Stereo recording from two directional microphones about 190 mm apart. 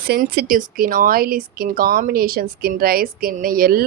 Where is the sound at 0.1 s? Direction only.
50° right (ahead or behind).